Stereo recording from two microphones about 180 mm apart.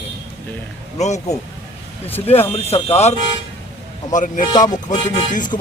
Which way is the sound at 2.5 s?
35° left (ahead or behind).